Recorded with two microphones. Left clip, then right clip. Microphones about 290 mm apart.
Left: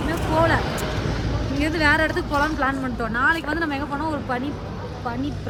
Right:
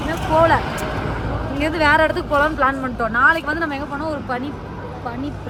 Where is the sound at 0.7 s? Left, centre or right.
Right.